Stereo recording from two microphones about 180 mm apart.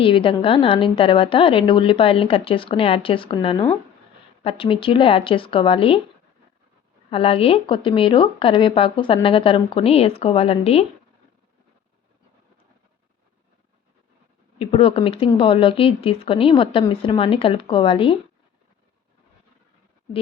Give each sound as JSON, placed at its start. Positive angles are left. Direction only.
{"t": 0.0, "sound": "speech", "side_deg": 30}
{"t": 7.1, "sound": "speech", "side_deg": 30}
{"t": 14.6, "sound": "speech", "side_deg": 35}